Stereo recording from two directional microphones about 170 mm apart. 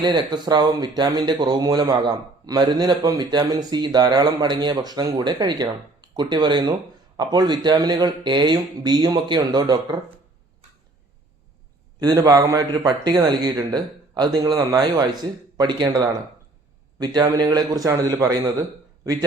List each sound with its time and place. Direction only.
0.0 s speech: 25° right (ahead or behind)
11.9 s speech: 20° right (ahead or behind)